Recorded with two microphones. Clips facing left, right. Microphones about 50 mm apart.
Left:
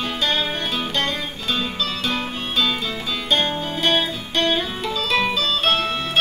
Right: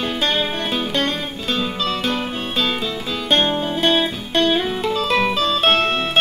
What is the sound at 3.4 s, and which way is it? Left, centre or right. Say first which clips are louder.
Music: right 4 dB; right.